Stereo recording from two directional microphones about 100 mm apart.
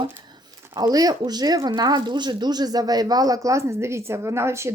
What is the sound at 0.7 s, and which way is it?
A woman's voice, 40° right (ahead or behind).